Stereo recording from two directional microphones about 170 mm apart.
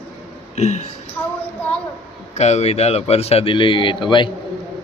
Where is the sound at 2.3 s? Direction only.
40° left (ahead or behind).